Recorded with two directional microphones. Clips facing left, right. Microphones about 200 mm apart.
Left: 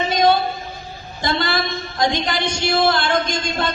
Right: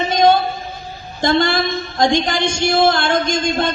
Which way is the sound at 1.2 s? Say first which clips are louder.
Right 6 dB; 50° right (ahead or behind).